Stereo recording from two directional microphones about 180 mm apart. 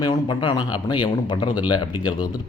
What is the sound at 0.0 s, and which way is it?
Speech, 25° left (ahead or behind).